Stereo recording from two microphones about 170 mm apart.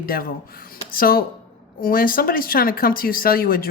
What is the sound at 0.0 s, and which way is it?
Speech, 60° left (ahead or behind).